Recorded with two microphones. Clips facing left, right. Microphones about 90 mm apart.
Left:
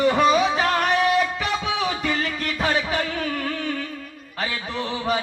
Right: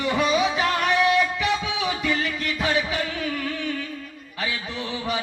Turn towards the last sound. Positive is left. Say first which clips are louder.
# left 4 dB
turn(degrees=40)  # may be behind; listen again after turning